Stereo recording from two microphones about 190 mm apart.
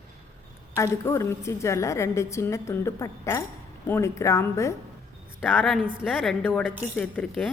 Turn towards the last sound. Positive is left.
turn(degrees=5)  # may be behind; listen again after turning